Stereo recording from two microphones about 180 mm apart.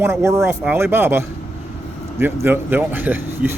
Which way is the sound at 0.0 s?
15° right (ahead or behind).